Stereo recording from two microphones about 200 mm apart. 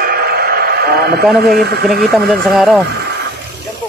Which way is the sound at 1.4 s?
55° right (ahead or behind).